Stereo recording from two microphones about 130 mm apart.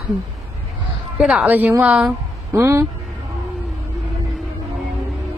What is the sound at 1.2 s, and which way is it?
Speech, 10° right (ahead or behind).